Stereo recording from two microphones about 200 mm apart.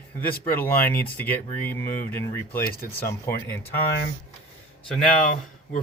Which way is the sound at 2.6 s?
50° left (ahead or behind).